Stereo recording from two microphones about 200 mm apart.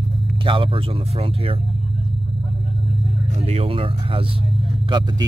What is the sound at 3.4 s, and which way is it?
Speech, 30° right (ahead or behind).